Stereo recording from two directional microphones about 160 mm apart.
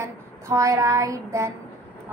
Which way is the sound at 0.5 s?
20° right (ahead or behind).